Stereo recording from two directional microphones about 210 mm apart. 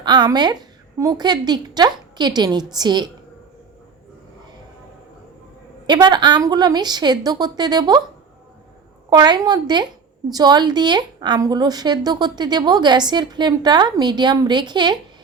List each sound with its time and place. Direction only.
0.0 s a woman's voice: 20° right (ahead or behind)
5.8 s a woman's voice: 20° right (ahead or behind)
9.0 s a woman's voice: 20° right (ahead or behind)